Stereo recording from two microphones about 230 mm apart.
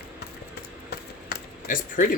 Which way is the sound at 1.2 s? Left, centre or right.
Left.